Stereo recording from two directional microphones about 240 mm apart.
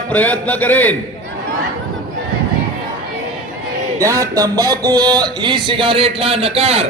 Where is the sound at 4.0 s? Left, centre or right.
Centre.